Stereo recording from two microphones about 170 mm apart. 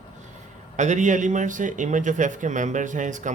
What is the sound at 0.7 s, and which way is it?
Speech, 45° right (ahead or behind).